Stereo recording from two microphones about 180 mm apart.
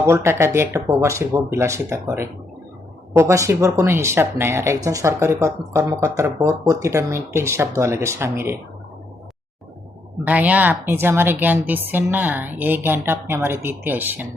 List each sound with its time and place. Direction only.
0.0 s speech: 15° right (ahead or behind)
10.2 s speech: 10° right (ahead or behind)